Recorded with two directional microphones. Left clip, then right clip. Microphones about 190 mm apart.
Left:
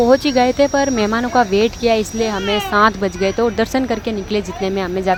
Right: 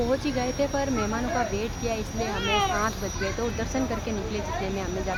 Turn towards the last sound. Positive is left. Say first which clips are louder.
# left 12 dB
turn(degrees=40)  # may be behind; listen again after turning